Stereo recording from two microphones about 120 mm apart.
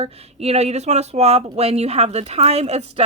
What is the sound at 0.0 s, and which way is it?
Speech, 60° right (ahead or behind).